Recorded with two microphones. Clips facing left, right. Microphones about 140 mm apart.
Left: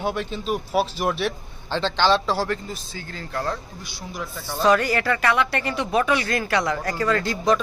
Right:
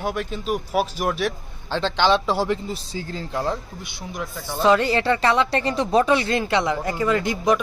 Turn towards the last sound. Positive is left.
turn(degrees=-15)  # may be behind; listen again after turning